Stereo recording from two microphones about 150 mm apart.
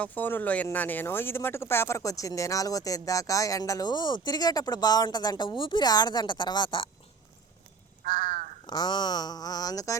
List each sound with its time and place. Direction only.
0.0 s speech: 10° left (ahead or behind); by 6.9 s 35° left (ahead or behind)
8.0 s crow: 60° right (ahead or behind)
8.6 s speech: 30° left (ahead or behind)